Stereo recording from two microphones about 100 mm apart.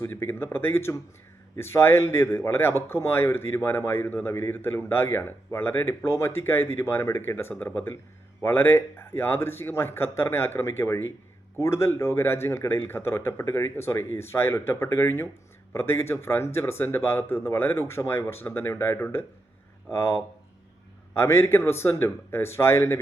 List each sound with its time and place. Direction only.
0.0 s speech: 25° left (ahead or behind)